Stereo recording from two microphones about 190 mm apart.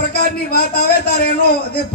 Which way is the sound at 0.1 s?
55° left (ahead or behind).